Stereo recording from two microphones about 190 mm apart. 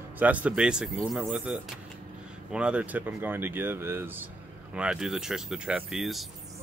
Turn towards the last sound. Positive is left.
turn(degrees=0)  # may be behind; listen again after turning